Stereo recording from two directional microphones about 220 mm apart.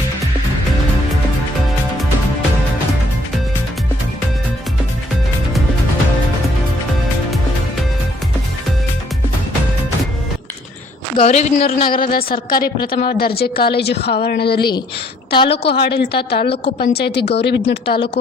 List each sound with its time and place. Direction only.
11.2 s speech: 30° left (ahead or behind)
11.9 s a woman's voice: 40° left (ahead or behind)